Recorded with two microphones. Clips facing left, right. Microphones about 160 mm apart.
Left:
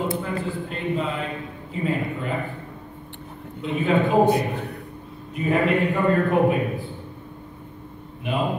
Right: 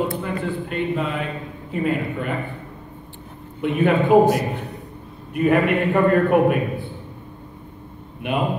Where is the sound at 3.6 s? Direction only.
65° right (ahead or behind).